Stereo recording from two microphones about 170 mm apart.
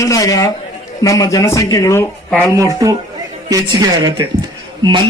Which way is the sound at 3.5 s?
20° right (ahead or behind).